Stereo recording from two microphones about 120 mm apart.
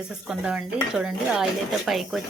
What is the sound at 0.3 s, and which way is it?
Speech, 5° right (ahead or behind).